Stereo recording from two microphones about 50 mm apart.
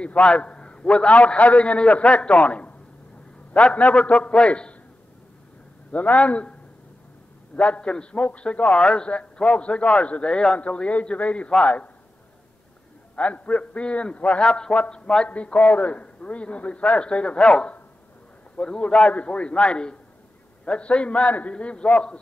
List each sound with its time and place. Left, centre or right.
0.0 s a man's voice: left
5.9 s a man's voice: left
7.5 s a man's voice: left
13.1 s a man's voice: left
15.2 s a man's voice: left